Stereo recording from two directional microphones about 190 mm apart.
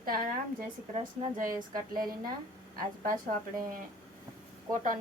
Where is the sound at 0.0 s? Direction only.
50° right (ahead or behind).